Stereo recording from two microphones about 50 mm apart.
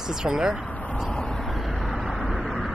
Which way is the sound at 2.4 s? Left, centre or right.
Centre.